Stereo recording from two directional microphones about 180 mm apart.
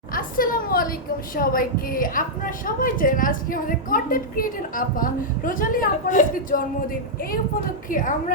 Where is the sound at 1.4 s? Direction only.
50° left (ahead or behind).